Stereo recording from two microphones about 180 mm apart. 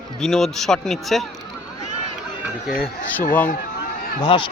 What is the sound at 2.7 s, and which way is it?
Speech, 50° left (ahead or behind).